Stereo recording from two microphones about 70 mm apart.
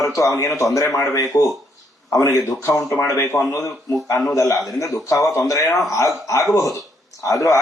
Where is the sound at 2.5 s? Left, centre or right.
Left.